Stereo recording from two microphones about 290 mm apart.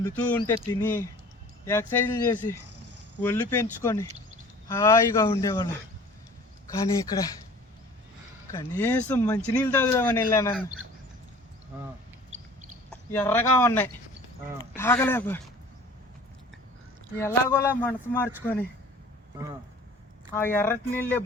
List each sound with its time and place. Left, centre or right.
0.0 s speech: centre
6.7 s speech: centre
8.5 s speech: centre
12.9 s speech: centre
17.2 s speech: centre
20.3 s speech: centre